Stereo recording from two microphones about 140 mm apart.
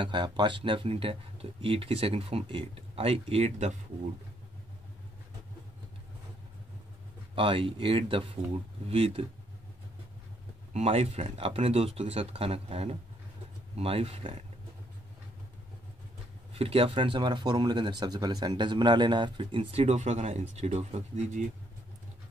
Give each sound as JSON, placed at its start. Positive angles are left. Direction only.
{"t": 0.0, "sound": "speech", "side_deg": -35}
{"t": 7.3, "sound": "speech", "side_deg": -40}
{"t": 10.7, "sound": "speech", "side_deg": -50}
{"t": 16.5, "sound": "speech", "side_deg": -40}